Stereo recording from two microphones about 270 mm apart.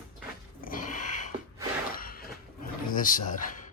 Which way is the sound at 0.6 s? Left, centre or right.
Left.